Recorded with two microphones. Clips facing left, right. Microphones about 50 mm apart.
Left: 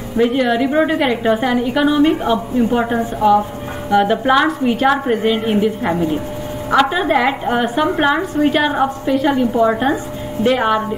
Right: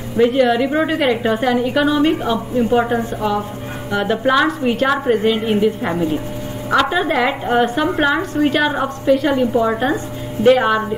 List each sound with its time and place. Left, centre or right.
0.2 s a woman's voice: centre
2.0 s a woman's voice: centre
2.5 s a woman's voice: centre